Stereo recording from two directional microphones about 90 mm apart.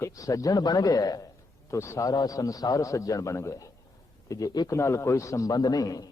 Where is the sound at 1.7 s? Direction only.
35° left (ahead or behind).